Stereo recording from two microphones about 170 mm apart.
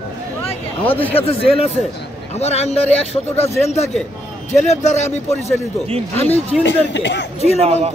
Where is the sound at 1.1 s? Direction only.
35° left (ahead or behind).